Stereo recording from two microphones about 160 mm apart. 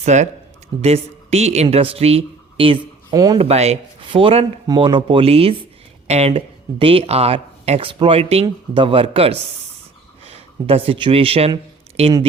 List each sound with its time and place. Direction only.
0.0 s a woman's voice: 45° right (ahead or behind)